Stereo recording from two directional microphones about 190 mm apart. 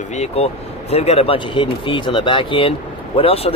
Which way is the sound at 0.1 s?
35° left (ahead or behind).